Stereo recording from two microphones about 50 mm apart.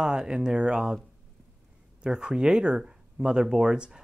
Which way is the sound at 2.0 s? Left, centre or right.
Centre.